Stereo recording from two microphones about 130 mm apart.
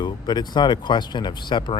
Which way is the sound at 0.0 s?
35° left (ahead or behind).